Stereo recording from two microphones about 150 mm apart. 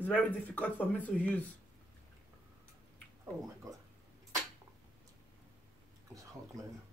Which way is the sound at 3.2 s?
20° right (ahead or behind).